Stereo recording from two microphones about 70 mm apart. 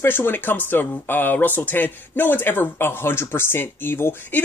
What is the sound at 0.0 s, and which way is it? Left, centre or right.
Speech, left.